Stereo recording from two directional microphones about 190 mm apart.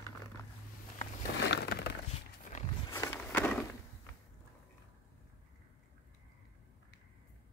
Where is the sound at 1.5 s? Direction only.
60° left (ahead or behind).